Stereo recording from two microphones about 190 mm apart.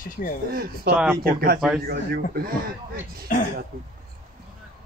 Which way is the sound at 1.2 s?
50° right (ahead or behind).